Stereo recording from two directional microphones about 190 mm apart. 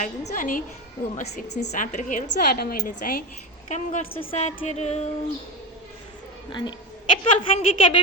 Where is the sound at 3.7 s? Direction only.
35° left (ahead or behind).